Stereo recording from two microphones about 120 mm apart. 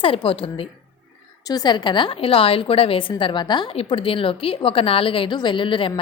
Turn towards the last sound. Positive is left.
turn(degrees=45)  # may be behind; listen again after turning